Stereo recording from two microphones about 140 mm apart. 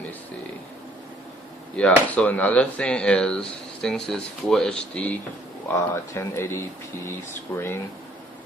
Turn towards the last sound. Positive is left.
turn(degrees=15)  # may be behind; listen again after turning